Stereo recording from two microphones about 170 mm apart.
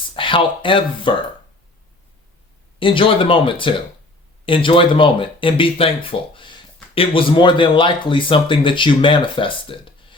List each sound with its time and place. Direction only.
0.2 s speech: 30° left (ahead or behind)
2.7 s speech: 30° left (ahead or behind)
9.6 s a sound: 30° left (ahead or behind)